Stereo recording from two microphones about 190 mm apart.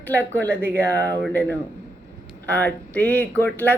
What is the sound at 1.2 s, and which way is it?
A man's voice, 10° left (ahead or behind).